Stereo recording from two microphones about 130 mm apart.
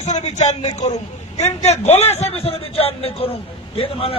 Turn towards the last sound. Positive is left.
turn(degrees=45)  # may be behind; listen again after turning